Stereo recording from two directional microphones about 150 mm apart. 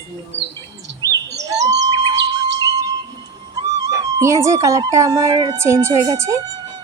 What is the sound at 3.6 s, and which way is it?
Speech, 20° right (ahead or behind).